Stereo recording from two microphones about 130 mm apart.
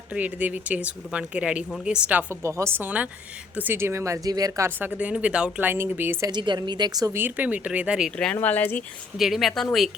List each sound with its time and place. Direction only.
0.1 s speech: 10° right (ahead or behind)
6.3 s a woman's voice: 35° right (ahead or behind)
7.2 s speech: 15° right (ahead or behind)
8.2 s speech: 10° left (ahead or behind)
9.1 s speech: centre (ahead or behind)